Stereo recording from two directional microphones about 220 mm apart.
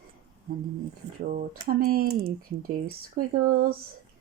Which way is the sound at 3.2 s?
40° right (ahead or behind).